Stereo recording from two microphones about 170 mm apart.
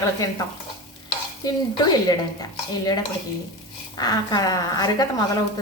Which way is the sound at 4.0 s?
25° left (ahead or behind).